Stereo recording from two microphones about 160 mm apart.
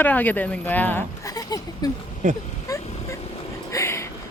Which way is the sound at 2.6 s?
20° left (ahead or behind).